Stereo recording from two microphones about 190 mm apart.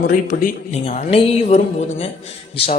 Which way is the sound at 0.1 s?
45° left (ahead or behind).